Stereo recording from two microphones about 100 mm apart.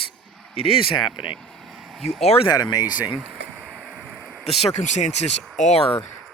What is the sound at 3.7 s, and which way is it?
Boat, 5° right (ahead or behind).